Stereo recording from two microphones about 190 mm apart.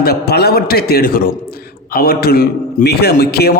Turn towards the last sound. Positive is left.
turn(degrees=55)  # may be behind; listen again after turning